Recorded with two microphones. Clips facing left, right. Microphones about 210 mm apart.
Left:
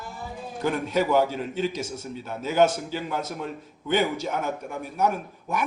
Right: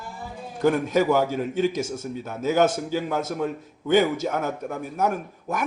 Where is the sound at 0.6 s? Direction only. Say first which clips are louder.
Right 5 dB; 45° right (ahead or behind).